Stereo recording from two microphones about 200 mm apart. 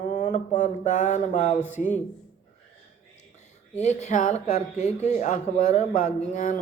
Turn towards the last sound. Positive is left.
turn(degrees=40)  # may be behind; listen again after turning